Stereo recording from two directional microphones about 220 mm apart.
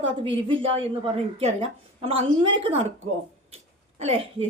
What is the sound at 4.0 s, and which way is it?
Speech, 25° right (ahead or behind).